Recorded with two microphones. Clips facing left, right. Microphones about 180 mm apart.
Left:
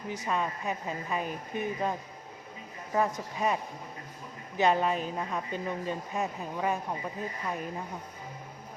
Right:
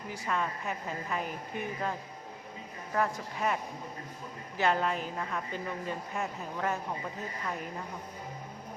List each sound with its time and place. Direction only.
0.1 s a woman's voice: 20° left (ahead or behind)